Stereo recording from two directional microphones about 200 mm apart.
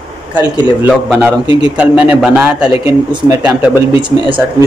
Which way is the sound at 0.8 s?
5° right (ahead or behind).